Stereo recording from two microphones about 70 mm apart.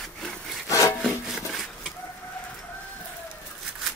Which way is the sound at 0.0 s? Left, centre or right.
Centre.